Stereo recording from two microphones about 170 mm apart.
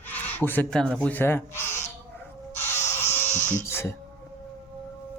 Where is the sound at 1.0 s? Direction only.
10° left (ahead or behind).